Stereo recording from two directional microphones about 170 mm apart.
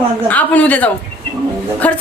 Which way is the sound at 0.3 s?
10° left (ahead or behind).